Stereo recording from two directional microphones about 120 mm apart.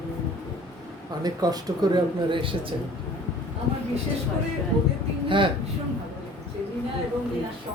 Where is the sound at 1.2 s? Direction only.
35° right (ahead or behind).